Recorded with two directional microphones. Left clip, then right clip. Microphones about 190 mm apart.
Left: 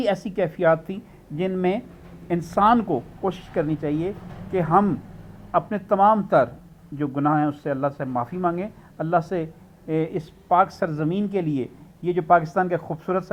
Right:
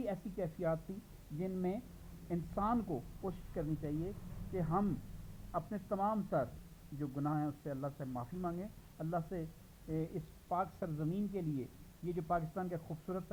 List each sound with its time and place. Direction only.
0.0 s a man's voice: 55° left (ahead or behind)
2.9 s a man's voice: 45° left (ahead or behind)
9.9 s a man's voice: 55° left (ahead or behind)